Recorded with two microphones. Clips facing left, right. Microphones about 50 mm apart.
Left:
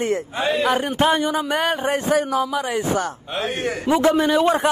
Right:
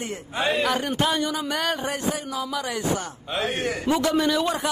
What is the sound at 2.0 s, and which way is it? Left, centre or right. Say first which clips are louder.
Speech: left 8 dB; left.